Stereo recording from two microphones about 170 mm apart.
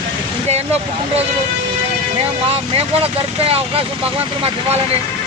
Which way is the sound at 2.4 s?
35° right (ahead or behind).